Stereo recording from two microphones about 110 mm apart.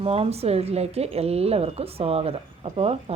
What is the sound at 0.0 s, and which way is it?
A woman's voice, 60° right (ahead or behind).